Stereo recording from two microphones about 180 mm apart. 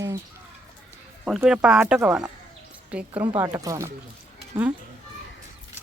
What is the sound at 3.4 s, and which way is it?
Speech, 20° right (ahead or behind).